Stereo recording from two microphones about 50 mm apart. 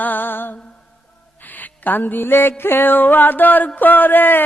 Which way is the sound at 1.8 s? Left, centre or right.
Left.